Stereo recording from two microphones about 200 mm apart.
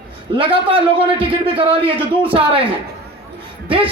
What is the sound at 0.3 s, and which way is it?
Speech, 25° right (ahead or behind).